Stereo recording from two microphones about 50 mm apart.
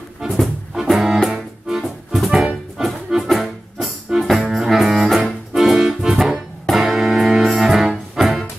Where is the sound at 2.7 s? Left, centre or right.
Centre.